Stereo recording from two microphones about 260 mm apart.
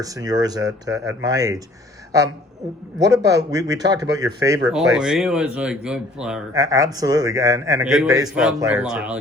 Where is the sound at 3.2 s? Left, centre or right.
Centre.